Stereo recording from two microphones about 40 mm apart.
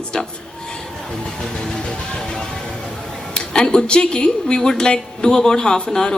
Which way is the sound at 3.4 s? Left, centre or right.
Centre.